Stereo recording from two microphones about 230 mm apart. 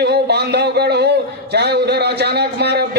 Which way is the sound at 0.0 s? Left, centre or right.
Right.